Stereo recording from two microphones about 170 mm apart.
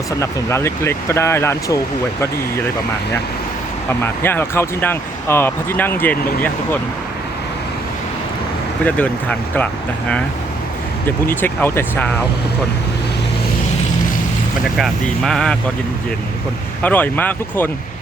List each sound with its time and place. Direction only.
0.2 s speech: 15° left (ahead or behind)
4.0 s speech: 15° left (ahead or behind)
8.8 s speech: 10° left (ahead or behind)
11.3 s speech: 10° left (ahead or behind)
14.8 s speech: 5° left (ahead or behind)
16.8 s speech: 10° left (ahead or behind)